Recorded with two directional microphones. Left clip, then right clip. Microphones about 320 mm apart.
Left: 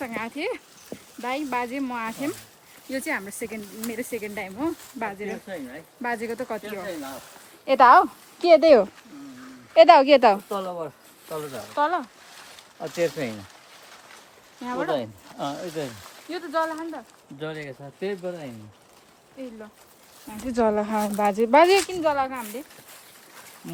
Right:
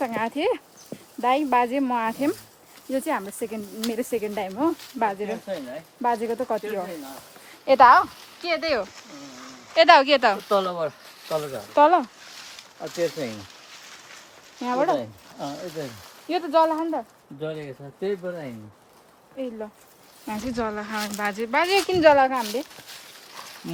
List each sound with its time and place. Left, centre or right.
0.0 s speech: centre
10.5 s speech: right
11.7 s speech: centre
12.4 s a sound: left
14.6 s speech: centre
14.9 s speech: left
16.3 s speech: centre
19.4 s speech: centre
20.5 s speech: centre
21.8 s speech: right